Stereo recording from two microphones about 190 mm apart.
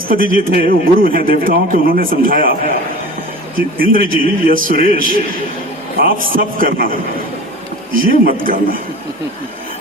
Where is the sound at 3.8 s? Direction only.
50° right (ahead or behind).